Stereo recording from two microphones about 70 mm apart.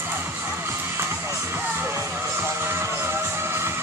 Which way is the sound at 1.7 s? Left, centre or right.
Right.